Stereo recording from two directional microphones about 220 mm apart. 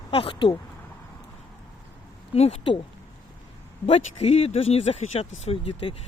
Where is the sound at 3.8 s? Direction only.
25° left (ahead or behind).